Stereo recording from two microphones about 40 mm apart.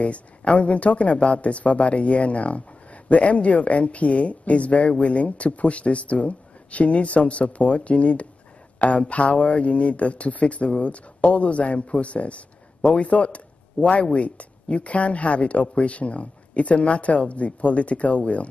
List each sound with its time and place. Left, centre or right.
0.0 s speech: left
8.7 s a sound: left
9.1 s speech: left